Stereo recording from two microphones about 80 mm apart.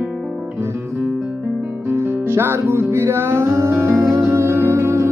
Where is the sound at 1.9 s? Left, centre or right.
Right.